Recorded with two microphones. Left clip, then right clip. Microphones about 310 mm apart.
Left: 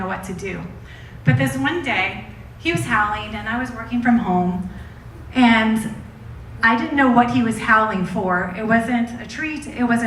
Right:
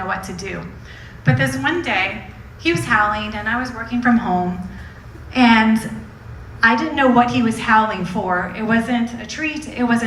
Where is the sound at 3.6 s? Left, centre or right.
Right.